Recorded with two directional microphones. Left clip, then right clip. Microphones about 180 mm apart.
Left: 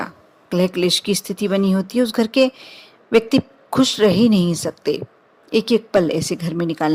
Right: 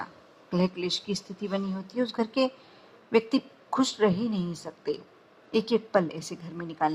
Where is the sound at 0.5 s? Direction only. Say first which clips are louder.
Left 11 dB; 45° left (ahead or behind).